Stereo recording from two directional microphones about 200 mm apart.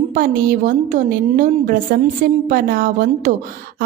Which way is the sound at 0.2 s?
40° right (ahead or behind).